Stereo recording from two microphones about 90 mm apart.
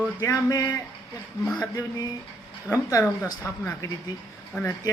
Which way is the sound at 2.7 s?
35° left (ahead or behind).